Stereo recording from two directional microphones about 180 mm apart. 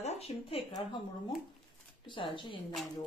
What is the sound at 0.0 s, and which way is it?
Speech, 35° left (ahead or behind).